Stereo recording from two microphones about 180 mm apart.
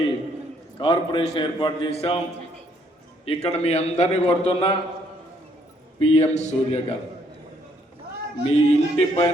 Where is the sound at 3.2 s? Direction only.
35° left (ahead or behind).